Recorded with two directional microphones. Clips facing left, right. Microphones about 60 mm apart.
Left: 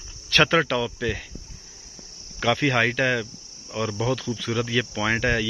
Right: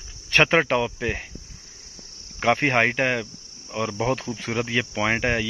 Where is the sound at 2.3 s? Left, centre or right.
Right.